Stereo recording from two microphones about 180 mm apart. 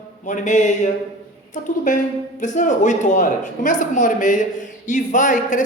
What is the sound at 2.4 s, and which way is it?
Speech, 45° left (ahead or behind).